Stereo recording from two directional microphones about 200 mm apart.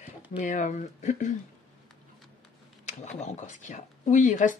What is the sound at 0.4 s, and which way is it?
Speech, 40° left (ahead or behind).